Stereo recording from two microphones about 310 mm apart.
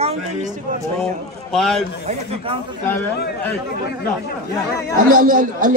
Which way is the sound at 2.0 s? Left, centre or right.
Centre.